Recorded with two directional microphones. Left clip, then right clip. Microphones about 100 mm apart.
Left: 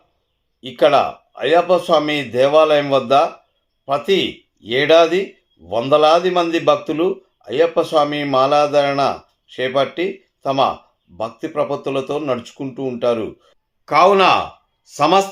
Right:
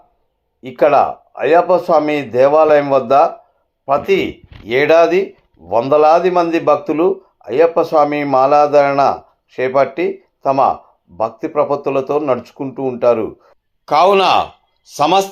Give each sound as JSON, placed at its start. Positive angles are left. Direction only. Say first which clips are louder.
{"t": 0.6, "sound": "speech", "louder": "right 2 dB", "side_deg": -5}
{"t": 2.6, "sound": "a man's voice", "louder": "right 1 dB", "side_deg": 35}
{"t": 3.1, "sound": "speech", "louder": "right 3 dB", "side_deg": 0}
{"t": 3.8, "sound": "a man's voice", "louder": "right 4 dB", "side_deg": 35}
{"t": 4.1, "sound": "speech", "louder": "right 2 dB", "side_deg": -5}